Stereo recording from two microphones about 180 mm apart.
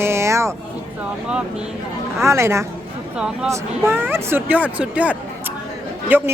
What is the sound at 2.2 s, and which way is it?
Speech, 15° right (ahead or behind).